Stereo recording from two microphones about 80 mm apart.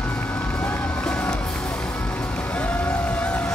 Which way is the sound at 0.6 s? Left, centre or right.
Centre.